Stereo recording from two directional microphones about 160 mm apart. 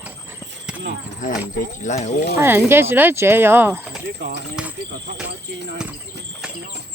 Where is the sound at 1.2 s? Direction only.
55° left (ahead or behind).